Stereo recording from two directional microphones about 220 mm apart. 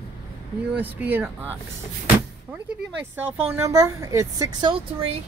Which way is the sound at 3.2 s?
10° right (ahead or behind).